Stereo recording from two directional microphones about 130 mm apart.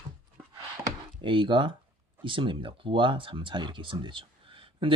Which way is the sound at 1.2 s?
40° right (ahead or behind).